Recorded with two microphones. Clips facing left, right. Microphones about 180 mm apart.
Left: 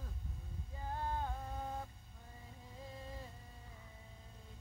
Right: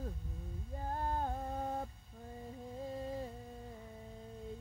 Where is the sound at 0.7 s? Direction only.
45° right (ahead or behind).